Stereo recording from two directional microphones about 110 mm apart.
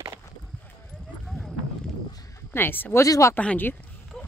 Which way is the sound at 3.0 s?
30° left (ahead or behind).